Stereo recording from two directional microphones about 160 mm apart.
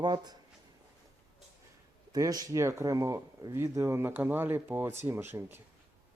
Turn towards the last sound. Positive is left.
turn(degrees=-15)  # may be behind; listen again after turning